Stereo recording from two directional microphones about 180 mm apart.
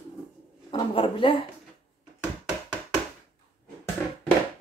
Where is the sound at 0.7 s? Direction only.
25° left (ahead or behind).